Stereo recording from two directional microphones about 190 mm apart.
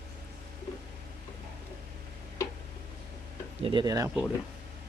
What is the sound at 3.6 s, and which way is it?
Speech, 25° right (ahead or behind).